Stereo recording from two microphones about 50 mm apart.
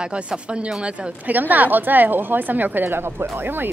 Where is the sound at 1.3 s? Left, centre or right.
Right.